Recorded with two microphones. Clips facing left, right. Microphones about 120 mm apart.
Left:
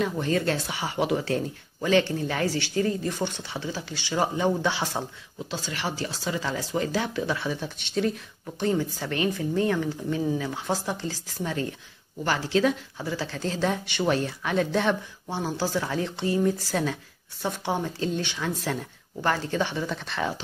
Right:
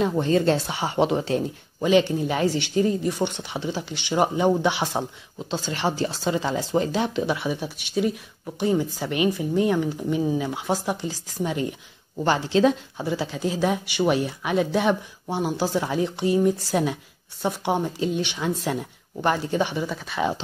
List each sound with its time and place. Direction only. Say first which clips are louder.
0.0 s speech: right 5 dB; 25° right (ahead or behind)
5.5 s speech: right 6 dB; 25° right (ahead or behind); by 20.2 s 5° right (ahead or behind)